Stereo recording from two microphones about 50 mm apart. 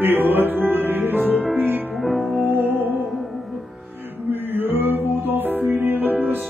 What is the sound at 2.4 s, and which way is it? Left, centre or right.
Music, right.